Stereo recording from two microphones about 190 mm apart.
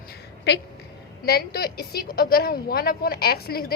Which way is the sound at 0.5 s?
60° left (ahead or behind).